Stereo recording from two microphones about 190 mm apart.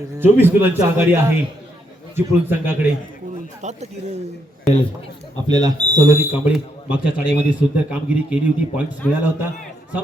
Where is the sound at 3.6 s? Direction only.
35° right (ahead or behind).